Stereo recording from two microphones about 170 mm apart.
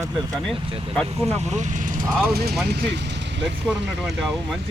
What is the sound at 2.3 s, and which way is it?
Speech, 70° right (ahead or behind).